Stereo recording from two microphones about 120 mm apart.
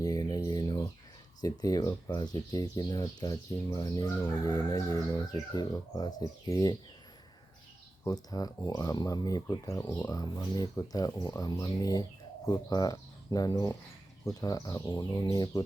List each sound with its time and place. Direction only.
0.0 s a sound: 30° left (ahead or behind)
1.4 s speech: 30° left (ahead or behind)
8.0 s speech: 30° left (ahead or behind)